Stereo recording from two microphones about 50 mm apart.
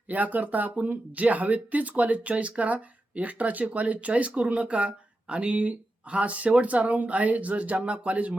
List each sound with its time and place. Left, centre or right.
0.1 s speech: right